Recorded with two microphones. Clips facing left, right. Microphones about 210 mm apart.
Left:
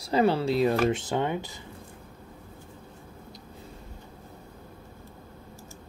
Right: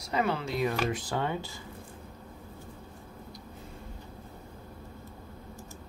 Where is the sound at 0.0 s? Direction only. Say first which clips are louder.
Left 7 dB; 30° left (ahead or behind).